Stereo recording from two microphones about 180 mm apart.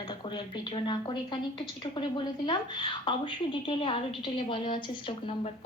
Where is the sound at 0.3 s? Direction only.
25° left (ahead or behind).